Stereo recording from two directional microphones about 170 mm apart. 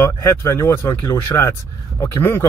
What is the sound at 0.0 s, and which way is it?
Speech, 15° left (ahead or behind).